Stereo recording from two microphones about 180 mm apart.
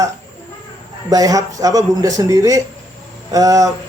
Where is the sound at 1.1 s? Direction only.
20° right (ahead or behind).